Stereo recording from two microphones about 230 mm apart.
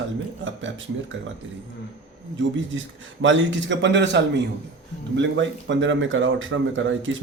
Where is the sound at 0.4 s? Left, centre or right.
Right.